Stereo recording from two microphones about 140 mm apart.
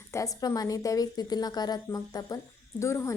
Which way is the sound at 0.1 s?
25° left (ahead or behind).